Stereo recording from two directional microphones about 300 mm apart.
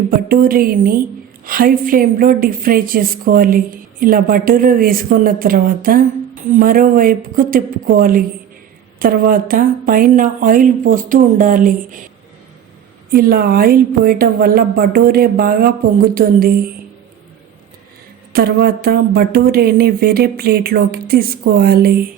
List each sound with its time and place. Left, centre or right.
0.1 s a woman's voice: right
13.1 s a woman's voice: right
18.3 s speech: right